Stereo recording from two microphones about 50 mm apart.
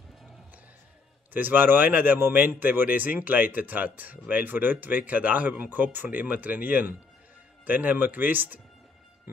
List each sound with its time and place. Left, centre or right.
1.3 s speech: right